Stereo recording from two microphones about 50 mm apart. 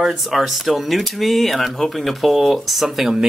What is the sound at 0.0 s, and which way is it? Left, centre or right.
Speech, centre.